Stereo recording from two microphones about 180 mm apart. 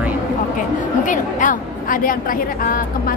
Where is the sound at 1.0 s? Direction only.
45° left (ahead or behind).